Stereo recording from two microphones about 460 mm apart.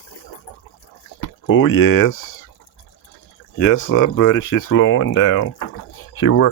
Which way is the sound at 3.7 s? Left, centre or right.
Left.